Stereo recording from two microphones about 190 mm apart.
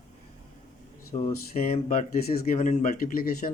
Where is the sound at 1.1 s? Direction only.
35° left (ahead or behind).